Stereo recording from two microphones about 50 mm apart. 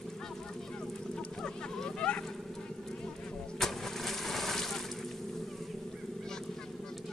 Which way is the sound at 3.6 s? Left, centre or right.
Centre.